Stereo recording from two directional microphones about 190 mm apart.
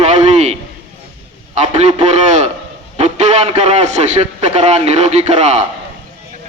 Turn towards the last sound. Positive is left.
turn(degrees=-35)  # may be behind; listen again after turning